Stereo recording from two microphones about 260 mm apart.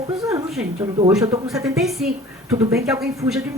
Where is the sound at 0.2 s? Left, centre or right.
Centre.